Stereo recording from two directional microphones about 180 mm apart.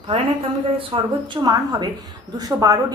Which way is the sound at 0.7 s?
25° right (ahead or behind).